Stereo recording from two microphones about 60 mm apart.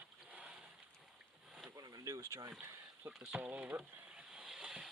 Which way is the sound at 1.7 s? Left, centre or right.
Right.